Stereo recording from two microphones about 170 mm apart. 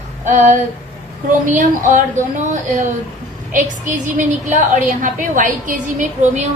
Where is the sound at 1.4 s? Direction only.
45° right (ahead or behind).